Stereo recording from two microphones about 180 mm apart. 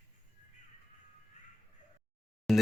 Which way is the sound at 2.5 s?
Centre (ahead or behind).